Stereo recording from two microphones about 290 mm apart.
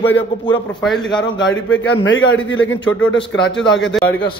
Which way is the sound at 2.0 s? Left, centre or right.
Left.